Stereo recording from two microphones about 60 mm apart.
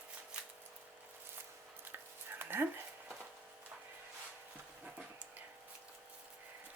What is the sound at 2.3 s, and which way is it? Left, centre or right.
Dog, right.